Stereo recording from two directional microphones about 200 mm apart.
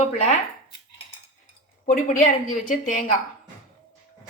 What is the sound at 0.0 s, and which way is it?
Speech, 35° left (ahead or behind).